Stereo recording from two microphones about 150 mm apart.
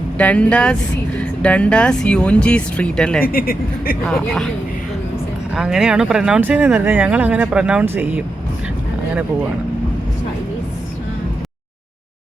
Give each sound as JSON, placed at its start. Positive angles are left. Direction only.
{"t": 0.2, "sound": "speech", "side_deg": 10}
{"t": 3.3, "sound": "speech", "side_deg": 80}
{"t": 4.0, "sound": "speech", "side_deg": 5}
{"t": 5.5, "sound": "speech", "side_deg": -5}